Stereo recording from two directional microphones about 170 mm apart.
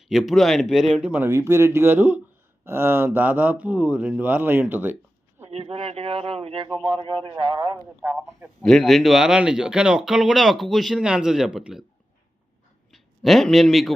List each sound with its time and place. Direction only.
0.0 s speech: centre (ahead or behind)
5.5 s speech: 35° right (ahead or behind)
8.0 s a man's voice: 5° right (ahead or behind)
12.9 s speech: centre (ahead or behind)